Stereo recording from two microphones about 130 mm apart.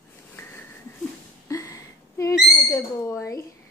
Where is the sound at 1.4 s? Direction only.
25° left (ahead or behind).